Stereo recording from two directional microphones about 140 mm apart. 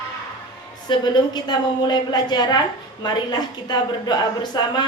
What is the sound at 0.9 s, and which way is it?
A man's voice, 30° left (ahead or behind).